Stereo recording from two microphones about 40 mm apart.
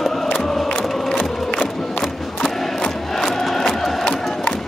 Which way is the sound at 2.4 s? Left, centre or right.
Centre.